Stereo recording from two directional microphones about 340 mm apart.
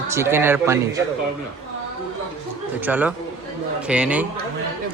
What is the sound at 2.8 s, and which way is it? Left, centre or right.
Speech, centre.